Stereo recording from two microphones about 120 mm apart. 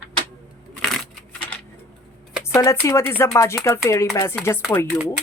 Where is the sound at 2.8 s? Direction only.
20° left (ahead or behind).